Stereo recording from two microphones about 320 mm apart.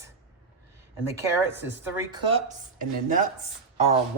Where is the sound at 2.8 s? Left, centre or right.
Right.